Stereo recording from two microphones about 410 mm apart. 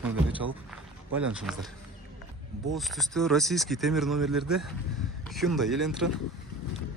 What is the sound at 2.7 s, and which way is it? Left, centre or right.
Speech, centre.